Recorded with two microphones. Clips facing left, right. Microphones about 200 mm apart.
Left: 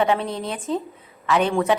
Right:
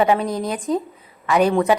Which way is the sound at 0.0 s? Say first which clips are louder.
Right 3 dB; 5° right (ahead or behind).